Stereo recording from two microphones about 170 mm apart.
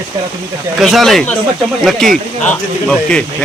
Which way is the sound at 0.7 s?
Centre (ahead or behind).